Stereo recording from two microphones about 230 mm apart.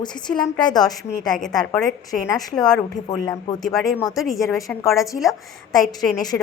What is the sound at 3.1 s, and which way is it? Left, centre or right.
Speech, centre.